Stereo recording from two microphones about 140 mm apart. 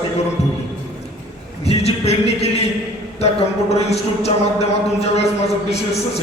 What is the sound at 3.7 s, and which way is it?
A man's voice, 50° left (ahead or behind).